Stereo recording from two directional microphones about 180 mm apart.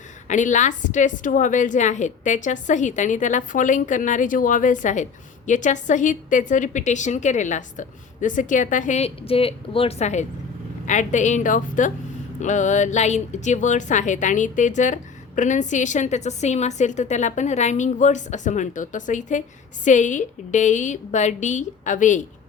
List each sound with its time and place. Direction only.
0.3 s a woman's voice: 45° left (ahead or behind)